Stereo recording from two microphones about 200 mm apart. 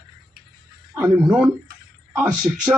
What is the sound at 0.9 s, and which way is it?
A man's voice, 15° right (ahead or behind).